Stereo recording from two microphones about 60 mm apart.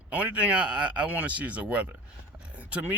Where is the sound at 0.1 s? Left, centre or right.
Right.